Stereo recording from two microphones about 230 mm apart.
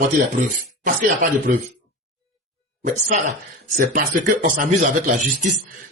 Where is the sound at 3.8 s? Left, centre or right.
Right.